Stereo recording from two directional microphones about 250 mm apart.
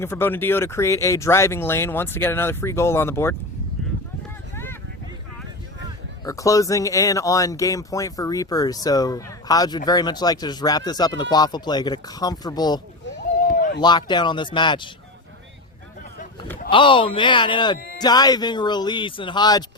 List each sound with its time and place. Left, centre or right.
0.0 s speech: centre
4.5 s vehicle: centre
6.2 s speech: centre
13.4 s run: left
13.8 s speech: centre
16.6 s speech: centre